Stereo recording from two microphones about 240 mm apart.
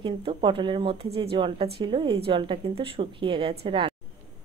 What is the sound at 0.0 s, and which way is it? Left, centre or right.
A woman's voice, right.